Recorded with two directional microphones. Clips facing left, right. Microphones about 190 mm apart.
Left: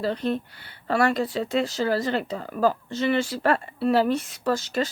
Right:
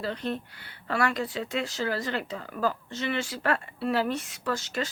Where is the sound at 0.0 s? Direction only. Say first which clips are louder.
Left 6 dB; 35° left (ahead or behind).